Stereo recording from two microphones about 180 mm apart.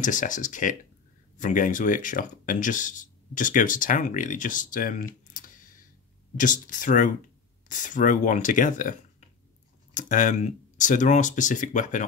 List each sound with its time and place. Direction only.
0.0 s speech: 45° left (ahead or behind)
9.9 s speech: 45° left (ahead or behind)